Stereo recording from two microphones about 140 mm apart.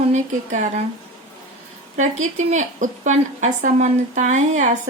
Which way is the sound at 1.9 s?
60° right (ahead or behind).